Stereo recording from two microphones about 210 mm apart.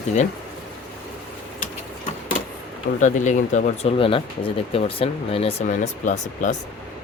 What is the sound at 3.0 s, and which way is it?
Speech, 35° left (ahead or behind).